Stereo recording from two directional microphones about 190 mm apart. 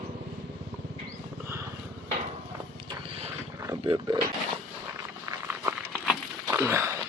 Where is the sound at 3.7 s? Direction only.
20° right (ahead or behind).